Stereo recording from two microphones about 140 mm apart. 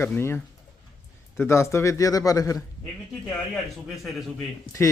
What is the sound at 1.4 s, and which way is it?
A man's voice, 20° left (ahead or behind).